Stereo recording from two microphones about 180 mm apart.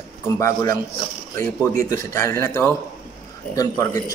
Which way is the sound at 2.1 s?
15° left (ahead or behind).